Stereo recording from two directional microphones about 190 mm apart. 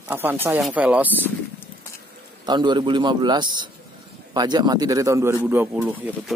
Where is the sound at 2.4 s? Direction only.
25° right (ahead or behind).